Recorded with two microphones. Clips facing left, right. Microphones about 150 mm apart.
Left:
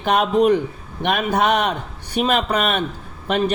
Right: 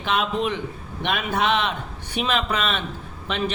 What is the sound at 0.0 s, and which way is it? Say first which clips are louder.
A man's voice: left 7 dB; 45° left (ahead or behind).